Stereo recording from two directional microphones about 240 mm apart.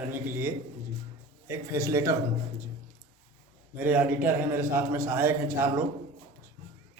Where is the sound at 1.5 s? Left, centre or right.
Centre.